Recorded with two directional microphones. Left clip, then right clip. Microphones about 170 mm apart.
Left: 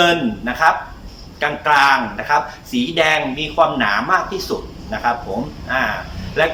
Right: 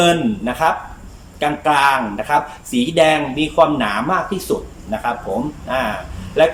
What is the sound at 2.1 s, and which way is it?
Speech, 20° right (ahead or behind).